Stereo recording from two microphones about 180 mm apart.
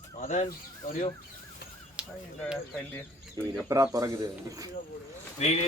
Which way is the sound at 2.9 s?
5° left (ahead or behind).